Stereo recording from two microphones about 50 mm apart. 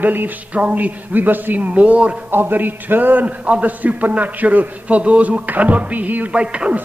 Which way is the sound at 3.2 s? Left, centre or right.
Right.